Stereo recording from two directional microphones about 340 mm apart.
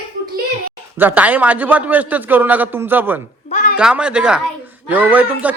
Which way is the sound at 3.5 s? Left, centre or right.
Left.